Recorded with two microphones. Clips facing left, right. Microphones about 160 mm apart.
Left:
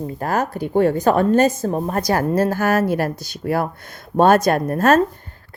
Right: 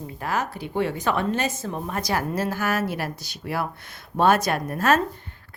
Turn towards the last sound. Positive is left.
turn(degrees=45)  # may be behind; listen again after turning